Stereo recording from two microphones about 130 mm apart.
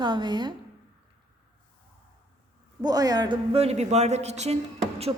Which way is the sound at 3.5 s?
55° right (ahead or behind).